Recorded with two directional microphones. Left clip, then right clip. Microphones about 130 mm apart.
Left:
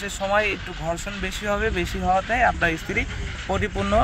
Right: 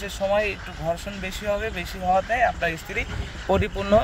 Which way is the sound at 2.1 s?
90° right.